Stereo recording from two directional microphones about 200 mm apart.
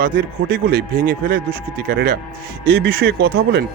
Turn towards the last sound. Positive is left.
turn(degrees=-55)  # may be behind; listen again after turning